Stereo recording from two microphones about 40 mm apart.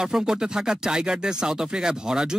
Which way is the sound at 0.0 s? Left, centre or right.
Centre.